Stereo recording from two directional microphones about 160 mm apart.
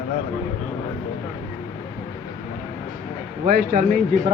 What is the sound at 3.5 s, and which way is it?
Speech, 65° right (ahead or behind).